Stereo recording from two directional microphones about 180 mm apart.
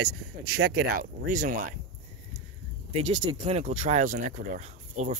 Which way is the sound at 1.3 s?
50° right (ahead or behind).